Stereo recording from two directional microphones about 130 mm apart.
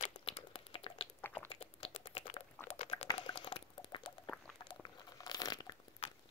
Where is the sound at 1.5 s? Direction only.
50° left (ahead or behind).